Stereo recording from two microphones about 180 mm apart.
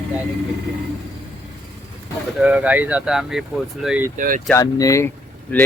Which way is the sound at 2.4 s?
5° right (ahead or behind).